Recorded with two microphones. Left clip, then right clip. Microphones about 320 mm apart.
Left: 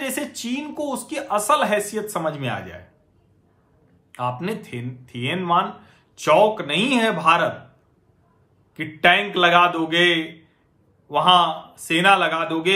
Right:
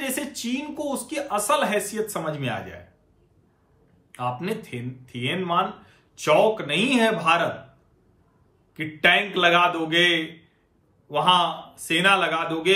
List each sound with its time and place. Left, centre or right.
0.0 s speech: centre
4.1 s speech: centre
8.7 s speech: centre